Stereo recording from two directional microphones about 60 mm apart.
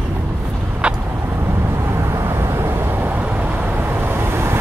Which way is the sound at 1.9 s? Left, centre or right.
Right.